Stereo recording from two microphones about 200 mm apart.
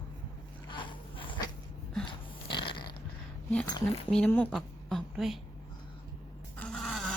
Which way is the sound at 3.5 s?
5° left (ahead or behind).